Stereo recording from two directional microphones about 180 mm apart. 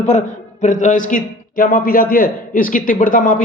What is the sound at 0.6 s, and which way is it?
A man's voice, 45° left (ahead or behind).